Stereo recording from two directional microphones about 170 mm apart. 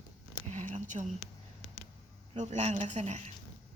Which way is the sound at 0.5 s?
45° right (ahead or behind).